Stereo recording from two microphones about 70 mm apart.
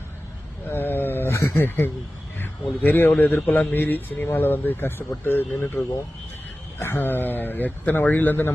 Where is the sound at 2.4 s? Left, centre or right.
Left.